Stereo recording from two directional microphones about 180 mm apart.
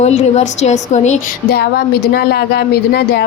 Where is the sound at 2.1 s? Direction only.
60° left (ahead or behind).